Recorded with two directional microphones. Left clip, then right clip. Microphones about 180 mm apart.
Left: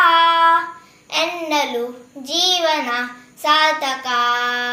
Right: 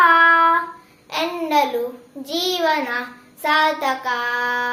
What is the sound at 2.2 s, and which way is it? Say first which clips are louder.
Child singing: left 3 dB; 15° right (ahead or behind).